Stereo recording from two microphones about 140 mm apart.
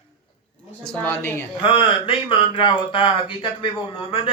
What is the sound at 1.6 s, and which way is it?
A man's voice, 40° left (ahead or behind).